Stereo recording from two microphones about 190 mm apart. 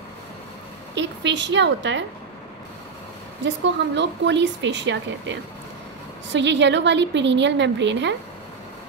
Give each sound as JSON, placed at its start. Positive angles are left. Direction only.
{"t": 0.9, "sound": "speech", "side_deg": -70}
{"t": 3.4, "sound": "speech", "side_deg": -65}